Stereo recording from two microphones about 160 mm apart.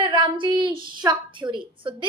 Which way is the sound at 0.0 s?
30° right (ahead or behind).